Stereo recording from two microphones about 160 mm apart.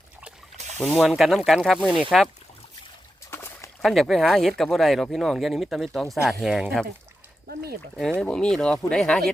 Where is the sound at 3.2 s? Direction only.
15° left (ahead or behind).